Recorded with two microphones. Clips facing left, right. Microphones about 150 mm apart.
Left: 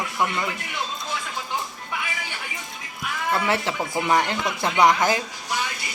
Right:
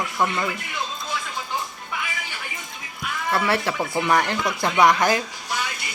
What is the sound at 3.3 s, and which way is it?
Speech, 15° left (ahead or behind).